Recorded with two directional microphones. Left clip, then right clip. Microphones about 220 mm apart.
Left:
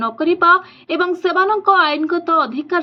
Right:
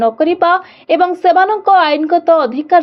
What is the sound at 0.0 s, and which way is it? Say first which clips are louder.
A woman's voice: right 3 dB; 10° right (ahead or behind).